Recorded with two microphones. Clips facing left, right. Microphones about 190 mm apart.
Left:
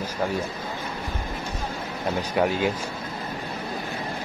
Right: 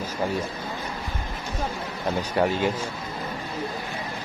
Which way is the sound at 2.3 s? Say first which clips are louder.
Even; 5° left (ahead or behind).